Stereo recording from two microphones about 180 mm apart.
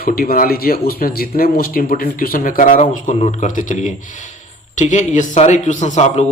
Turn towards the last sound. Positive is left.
turn(degrees=40)  # may be behind; listen again after turning